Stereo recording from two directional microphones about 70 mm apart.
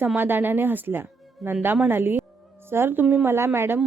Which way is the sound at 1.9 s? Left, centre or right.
Right.